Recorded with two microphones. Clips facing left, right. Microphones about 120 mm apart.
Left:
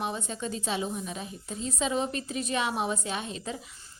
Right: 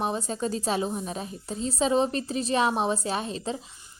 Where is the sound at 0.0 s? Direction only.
35° right (ahead or behind).